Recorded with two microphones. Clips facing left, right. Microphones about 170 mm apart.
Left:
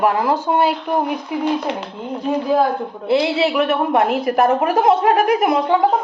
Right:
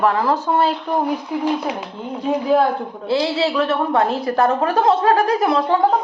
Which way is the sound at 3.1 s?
20° left (ahead or behind).